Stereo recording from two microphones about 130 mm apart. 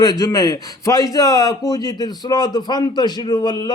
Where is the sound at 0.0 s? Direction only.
30° left (ahead or behind).